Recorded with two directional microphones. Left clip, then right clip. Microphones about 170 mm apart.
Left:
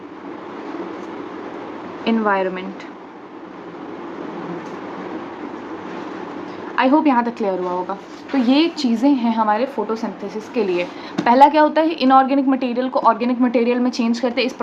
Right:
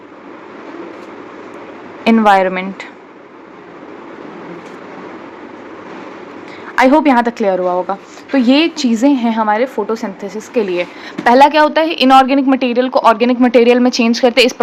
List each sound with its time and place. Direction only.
2.0 s a woman's voice: 45° right (ahead or behind)
6.7 s a woman's voice: 40° right (ahead or behind)